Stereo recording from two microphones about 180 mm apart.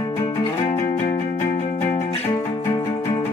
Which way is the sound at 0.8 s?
40° left (ahead or behind).